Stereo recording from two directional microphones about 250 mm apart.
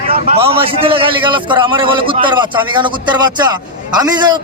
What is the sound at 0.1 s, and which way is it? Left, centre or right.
A man's voice, right.